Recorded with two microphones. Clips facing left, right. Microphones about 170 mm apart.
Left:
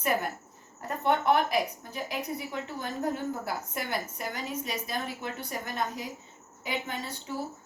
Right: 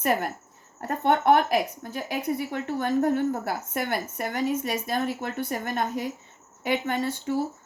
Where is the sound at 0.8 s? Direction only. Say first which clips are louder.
Right 4 dB; 60° right (ahead or behind).